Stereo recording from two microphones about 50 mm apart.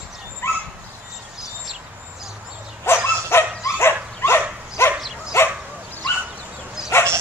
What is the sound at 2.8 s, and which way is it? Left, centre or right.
Dog, left.